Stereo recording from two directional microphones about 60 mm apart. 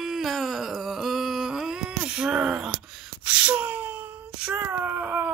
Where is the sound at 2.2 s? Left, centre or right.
Centre.